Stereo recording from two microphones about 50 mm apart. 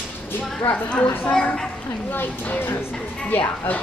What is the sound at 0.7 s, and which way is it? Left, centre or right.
Speech, left.